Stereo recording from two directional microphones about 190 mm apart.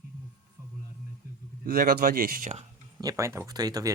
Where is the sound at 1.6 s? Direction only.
55° right (ahead or behind).